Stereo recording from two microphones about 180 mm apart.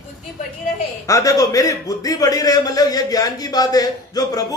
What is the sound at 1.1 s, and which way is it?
A man's voice, 20° left (ahead or behind).